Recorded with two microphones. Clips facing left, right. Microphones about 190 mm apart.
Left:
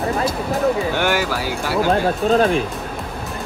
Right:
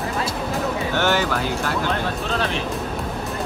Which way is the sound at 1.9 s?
45° left (ahead or behind).